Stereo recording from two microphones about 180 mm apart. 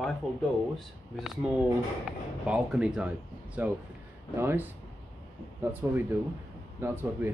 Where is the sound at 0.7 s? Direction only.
Centre (ahead or behind).